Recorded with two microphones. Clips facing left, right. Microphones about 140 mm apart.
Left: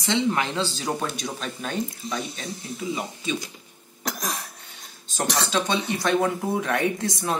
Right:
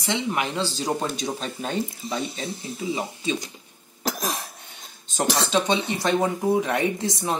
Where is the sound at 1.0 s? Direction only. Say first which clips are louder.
Right 2 dB; 30° right (ahead or behind).